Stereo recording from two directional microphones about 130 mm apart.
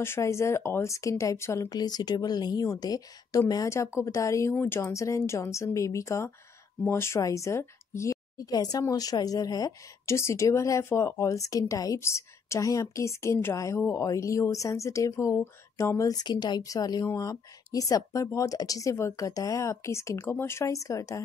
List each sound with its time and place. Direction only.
0.0 s speech: 20° left (ahead or behind)